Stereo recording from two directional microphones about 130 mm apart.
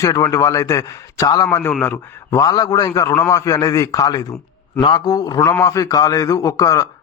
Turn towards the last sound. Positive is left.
turn(degrees=25)  # may be behind; listen again after turning